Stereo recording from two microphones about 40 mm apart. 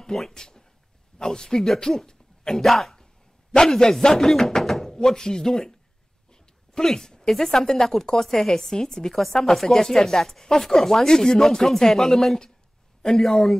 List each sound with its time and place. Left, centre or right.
0.3 s a man's voice: centre
4.6 s knock: centre
4.9 s speech: centre
6.3 s a sound: centre
6.9 s speech: centre